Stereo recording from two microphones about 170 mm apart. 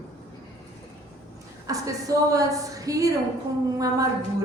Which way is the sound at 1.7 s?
20° right (ahead or behind).